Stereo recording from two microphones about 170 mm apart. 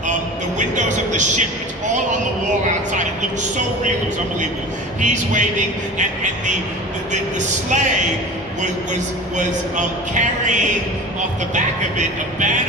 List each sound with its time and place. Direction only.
0.8 s a man's voice: 45° right (ahead or behind)
4.9 s a man's voice: 45° right (ahead or behind)
7.1 s a man's voice: 45° right (ahead or behind)
9.4 s a man's voice: 45° right (ahead or behind)